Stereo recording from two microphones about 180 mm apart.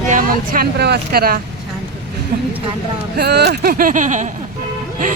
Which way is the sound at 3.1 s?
65° right (ahead or behind).